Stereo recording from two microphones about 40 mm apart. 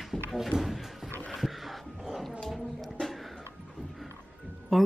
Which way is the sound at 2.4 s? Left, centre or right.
Centre.